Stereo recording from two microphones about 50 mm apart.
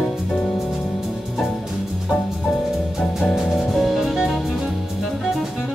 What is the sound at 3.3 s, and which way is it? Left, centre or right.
Music, centre.